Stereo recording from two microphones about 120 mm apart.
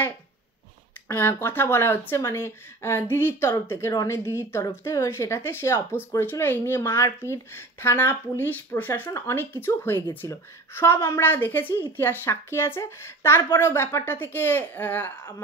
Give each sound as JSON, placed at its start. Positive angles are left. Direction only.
{"t": 1.0, "sound": "a woman's voice", "side_deg": 20}